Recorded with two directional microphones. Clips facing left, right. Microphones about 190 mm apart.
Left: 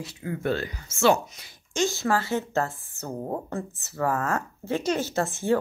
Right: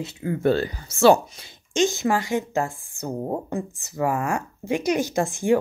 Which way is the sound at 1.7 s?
20° right (ahead or behind).